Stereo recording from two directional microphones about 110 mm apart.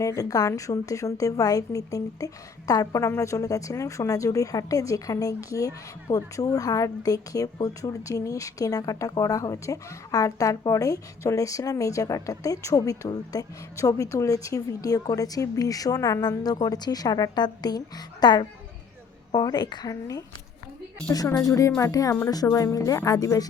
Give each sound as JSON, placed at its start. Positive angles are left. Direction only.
{"t": 0.0, "sound": "a woman's voice", "side_deg": 30}
{"t": 21.2, "sound": "a woman's voice", "side_deg": 25}